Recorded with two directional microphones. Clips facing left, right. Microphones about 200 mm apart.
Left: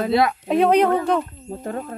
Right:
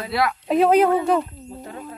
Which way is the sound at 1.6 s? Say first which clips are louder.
Left 8 dB; 50° left (ahead or behind).